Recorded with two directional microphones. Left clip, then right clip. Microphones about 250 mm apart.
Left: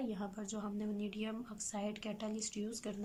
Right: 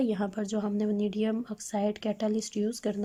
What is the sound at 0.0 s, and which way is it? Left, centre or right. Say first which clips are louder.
A woman's voice: right 13 dB; right.